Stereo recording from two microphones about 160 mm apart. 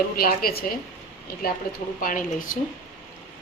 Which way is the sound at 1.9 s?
60° left (ahead or behind).